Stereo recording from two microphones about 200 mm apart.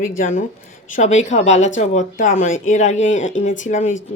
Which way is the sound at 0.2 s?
40° left (ahead or behind).